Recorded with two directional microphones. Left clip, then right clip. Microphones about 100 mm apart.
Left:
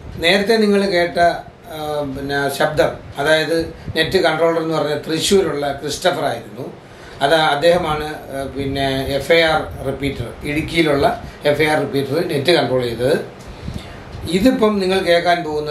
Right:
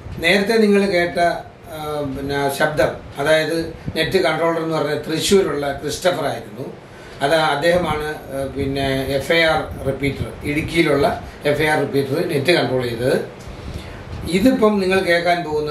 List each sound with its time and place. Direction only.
0.2 s speech: 15° left (ahead or behind)
14.2 s speech: 15° left (ahead or behind)